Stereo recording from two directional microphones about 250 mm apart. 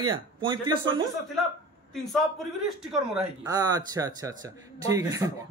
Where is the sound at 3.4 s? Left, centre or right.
Centre.